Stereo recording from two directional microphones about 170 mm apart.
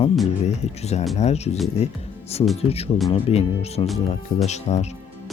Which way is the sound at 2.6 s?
35° left (ahead or behind).